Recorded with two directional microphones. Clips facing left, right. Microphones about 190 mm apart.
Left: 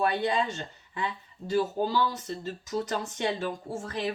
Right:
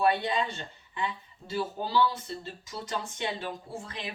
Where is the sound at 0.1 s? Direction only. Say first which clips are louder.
Left 1 dB; 45° left (ahead or behind).